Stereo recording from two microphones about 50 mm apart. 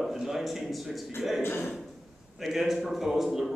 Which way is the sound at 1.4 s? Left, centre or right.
Left.